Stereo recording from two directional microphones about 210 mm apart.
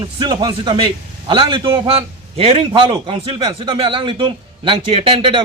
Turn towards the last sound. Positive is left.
turn(degrees=-25)  # may be behind; listen again after turning